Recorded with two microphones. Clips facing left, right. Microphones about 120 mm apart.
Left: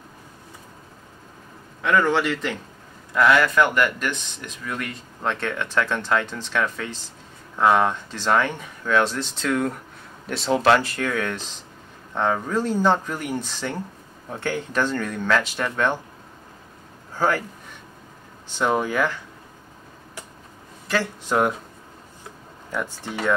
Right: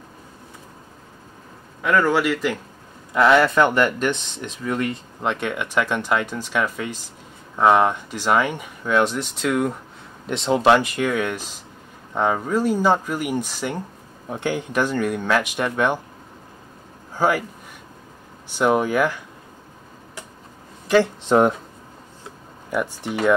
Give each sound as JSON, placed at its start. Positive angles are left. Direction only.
{"t": 1.8, "sound": "speech", "side_deg": -5}
{"t": 3.1, "sound": "speech", "side_deg": -25}
{"t": 17.1, "sound": "speech", "side_deg": -15}
{"t": 18.6, "sound": "speech", "side_deg": -15}
{"t": 20.9, "sound": "speech", "side_deg": -25}
{"t": 22.7, "sound": "speech", "side_deg": -15}